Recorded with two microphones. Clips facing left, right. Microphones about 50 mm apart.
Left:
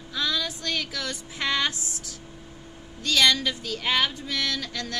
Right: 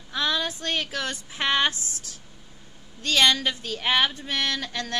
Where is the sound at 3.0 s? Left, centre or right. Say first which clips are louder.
Right 1 dB; right.